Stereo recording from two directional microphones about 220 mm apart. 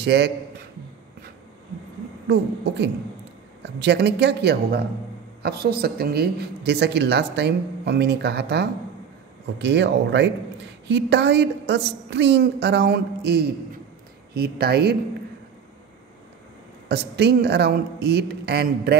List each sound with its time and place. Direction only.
0.0 s a woman's voice: 50° right (ahead or behind)
2.2 s a woman's voice: 50° right (ahead or behind)
16.9 s a woman's voice: 50° right (ahead or behind)